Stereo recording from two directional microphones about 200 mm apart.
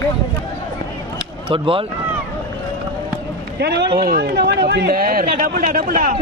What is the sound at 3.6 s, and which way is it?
A man's voice, 55° right (ahead or behind).